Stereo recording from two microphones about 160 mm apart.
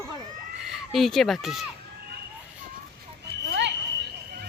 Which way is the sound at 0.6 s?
Centre (ahead or behind).